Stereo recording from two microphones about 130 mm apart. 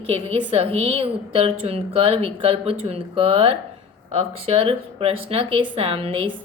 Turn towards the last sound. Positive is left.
turn(degrees=-45)  # may be behind; listen again after turning